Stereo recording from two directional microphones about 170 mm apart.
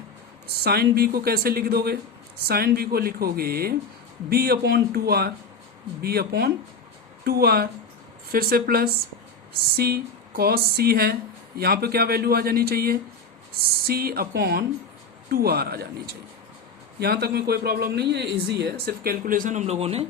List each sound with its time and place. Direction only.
0.4 s a man's voice: 65° right (ahead or behind); by 20.1 s 35° right (ahead or behind)